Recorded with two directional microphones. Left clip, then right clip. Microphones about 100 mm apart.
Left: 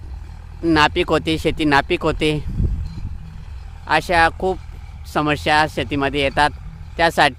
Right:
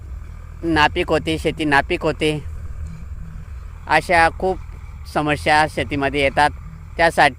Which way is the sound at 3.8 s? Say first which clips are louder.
Right 1 dB; 20° left (ahead or behind).